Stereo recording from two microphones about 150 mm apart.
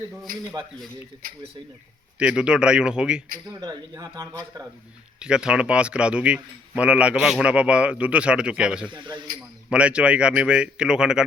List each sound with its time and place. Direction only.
2.1 s a man's voice: 5° right (ahead or behind)
3.6 s speech: 25° right (ahead or behind)
5.2 s speech: 5° right (ahead or behind)
8.9 s speech: 30° right (ahead or behind)
9.6 s speech: 5° right (ahead or behind)